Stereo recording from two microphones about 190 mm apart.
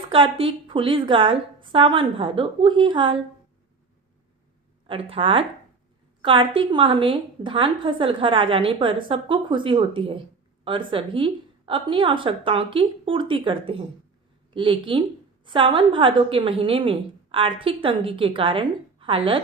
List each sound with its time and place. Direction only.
0.1 s a woman's voice: 30° right (ahead or behind)
4.9 s a woman's voice: 30° right (ahead or behind)